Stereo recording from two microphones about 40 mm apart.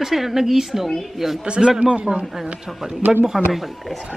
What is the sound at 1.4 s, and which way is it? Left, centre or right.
Speech, right.